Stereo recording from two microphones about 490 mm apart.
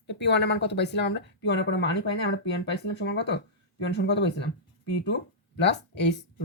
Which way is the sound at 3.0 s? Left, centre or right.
Left.